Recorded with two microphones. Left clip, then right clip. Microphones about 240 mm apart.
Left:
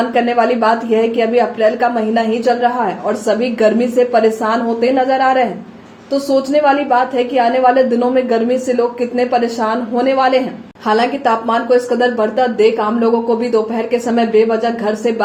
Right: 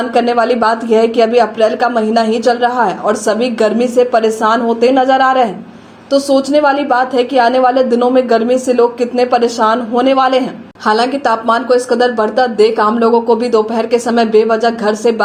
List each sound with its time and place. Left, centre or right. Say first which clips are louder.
0.1 s speech: right 2 dB; right